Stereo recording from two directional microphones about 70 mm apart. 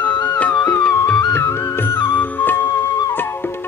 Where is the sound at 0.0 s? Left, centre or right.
Left.